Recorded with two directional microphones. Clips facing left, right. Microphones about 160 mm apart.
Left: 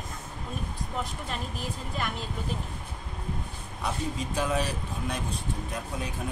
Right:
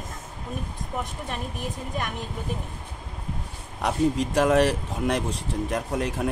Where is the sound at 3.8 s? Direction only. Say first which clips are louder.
Right 9 dB; 90° right.